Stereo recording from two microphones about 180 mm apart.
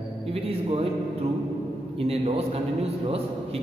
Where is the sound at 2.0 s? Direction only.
35° right (ahead or behind).